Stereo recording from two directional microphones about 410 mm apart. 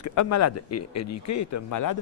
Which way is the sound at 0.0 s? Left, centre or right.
Left.